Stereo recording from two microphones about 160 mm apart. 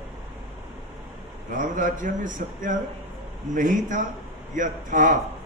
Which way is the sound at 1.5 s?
55° right (ahead or behind).